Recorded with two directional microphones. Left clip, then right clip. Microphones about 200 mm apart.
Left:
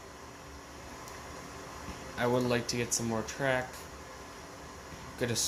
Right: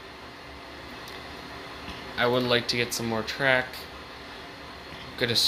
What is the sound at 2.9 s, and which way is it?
Speech, 20° right (ahead or behind).